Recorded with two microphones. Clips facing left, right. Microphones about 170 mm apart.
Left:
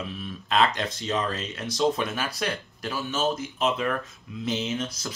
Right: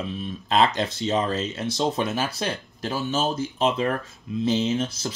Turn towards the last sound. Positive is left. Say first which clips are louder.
# right 5 dB
turn(degrees=-30)  # may be behind; listen again after turning